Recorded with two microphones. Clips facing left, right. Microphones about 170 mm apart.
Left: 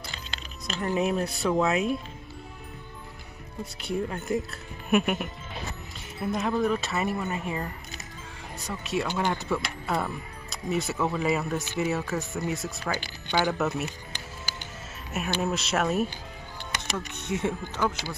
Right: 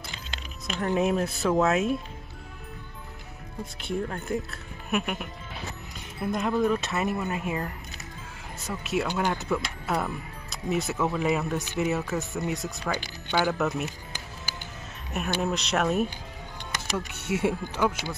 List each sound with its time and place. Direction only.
0.1 s keys jangling: 15° right (ahead or behind)
0.7 s speech: 5° left (ahead or behind)
3.8 s speech: centre (ahead or behind)
15.4 s speech: centre (ahead or behind)